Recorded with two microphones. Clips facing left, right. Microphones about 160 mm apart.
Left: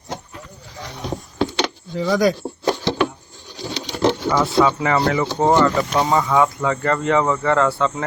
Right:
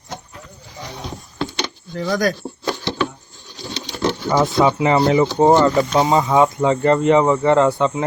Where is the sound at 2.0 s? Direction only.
5° left (ahead or behind).